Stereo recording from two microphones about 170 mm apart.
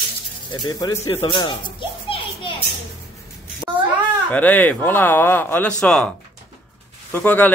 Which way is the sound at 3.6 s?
25° left (ahead or behind).